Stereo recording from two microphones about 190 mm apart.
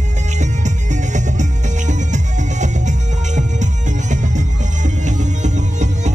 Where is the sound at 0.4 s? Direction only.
40° right (ahead or behind).